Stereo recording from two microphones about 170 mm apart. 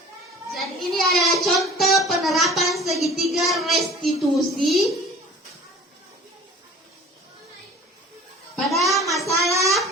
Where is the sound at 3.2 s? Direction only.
Centre (ahead or behind).